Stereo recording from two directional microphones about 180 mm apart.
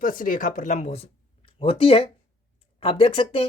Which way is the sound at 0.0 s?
50° left (ahead or behind).